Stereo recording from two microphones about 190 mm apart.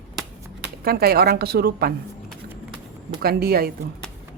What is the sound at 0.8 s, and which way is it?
Speech, 55° right (ahead or behind).